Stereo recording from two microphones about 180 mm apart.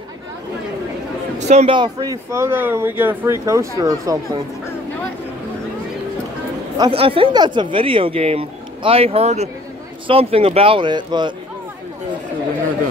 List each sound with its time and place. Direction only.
1.5 s a man's voice: 30° right (ahead or behind)
6.8 s speech: 30° right (ahead or behind)